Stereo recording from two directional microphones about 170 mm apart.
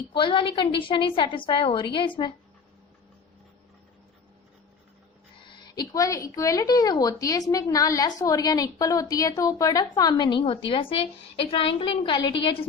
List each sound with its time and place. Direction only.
0.1 s speech: 30° left (ahead or behind)
5.5 s speech: 25° left (ahead or behind)